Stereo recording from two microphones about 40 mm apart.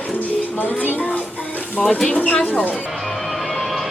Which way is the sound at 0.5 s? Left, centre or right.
Left.